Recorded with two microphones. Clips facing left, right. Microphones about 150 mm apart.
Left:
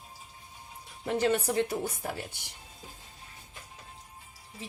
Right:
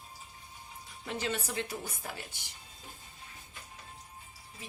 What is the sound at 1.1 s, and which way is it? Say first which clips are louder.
Speech: left 9 dB; 55° left (ahead or behind).